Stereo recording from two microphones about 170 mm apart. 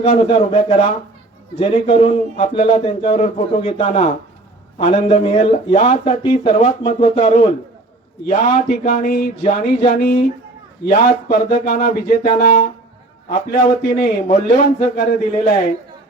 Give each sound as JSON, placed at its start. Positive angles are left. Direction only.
{"t": 0.0, "sound": "speech", "side_deg": 35}
{"t": 6.5, "sound": "speech", "side_deg": 50}
{"t": 8.8, "sound": "speech", "side_deg": 55}
{"t": 9.4, "sound": "speech", "side_deg": 35}
{"t": 9.9, "sound": "speech", "side_deg": 60}